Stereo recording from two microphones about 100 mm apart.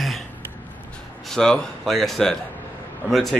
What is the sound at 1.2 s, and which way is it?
Speech, 5° left (ahead or behind).